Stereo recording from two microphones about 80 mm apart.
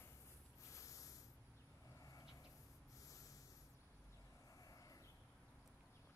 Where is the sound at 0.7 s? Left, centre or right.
Left.